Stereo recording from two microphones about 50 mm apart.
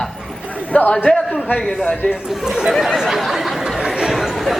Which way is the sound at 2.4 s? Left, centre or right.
Centre.